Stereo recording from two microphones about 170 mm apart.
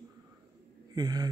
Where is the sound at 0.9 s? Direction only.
25° right (ahead or behind).